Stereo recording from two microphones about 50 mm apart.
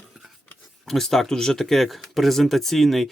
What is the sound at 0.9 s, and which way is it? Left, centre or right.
Speech, centre.